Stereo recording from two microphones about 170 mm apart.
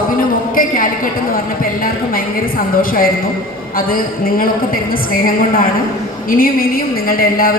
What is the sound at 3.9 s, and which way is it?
A woman's voice, 55° left (ahead or behind).